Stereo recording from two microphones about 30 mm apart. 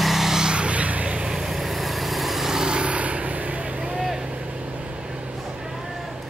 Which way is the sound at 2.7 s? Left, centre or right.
Right.